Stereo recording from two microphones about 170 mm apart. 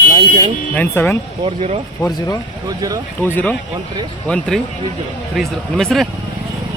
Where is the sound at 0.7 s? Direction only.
10° left (ahead or behind).